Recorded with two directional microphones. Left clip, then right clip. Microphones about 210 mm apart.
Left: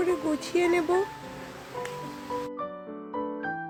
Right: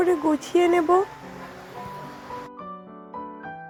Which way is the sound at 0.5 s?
10° right (ahead or behind).